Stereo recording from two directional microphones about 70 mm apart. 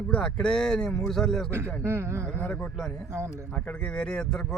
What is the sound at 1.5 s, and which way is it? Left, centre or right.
Speech, right.